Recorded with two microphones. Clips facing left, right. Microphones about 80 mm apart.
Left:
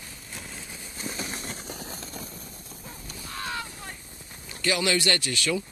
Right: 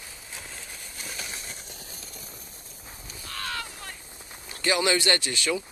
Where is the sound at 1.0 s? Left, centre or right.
Left.